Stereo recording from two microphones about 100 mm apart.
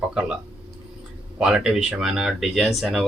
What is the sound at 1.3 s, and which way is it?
Speech, 10° right (ahead or behind).